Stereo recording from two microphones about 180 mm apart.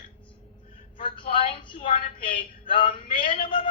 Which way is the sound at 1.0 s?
30° left (ahead or behind).